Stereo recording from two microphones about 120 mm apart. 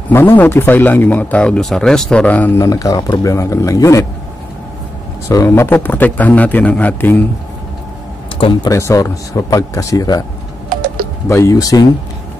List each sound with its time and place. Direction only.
0.1 s speech: 20° left (ahead or behind)
2.6 s speech: 30° left (ahead or behind)
5.3 s speech: 20° left (ahead or behind)
8.4 s speech: 40° left (ahead or behind)
8.6 s speech: 25° left (ahead or behind)
11.2 s speech: 25° left (ahead or behind)